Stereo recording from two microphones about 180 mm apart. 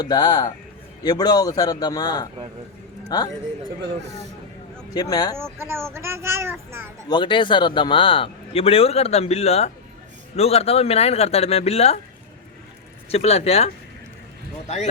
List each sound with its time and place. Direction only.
0.0 s a man's voice: 25° left (ahead or behind)
4.9 s a man's voice: 20° left (ahead or behind)
5.4 s speech: 15° right (ahead or behind)
7.1 s a man's voice: 25° left (ahead or behind)
13.1 s a man's voice: 35° left (ahead or behind)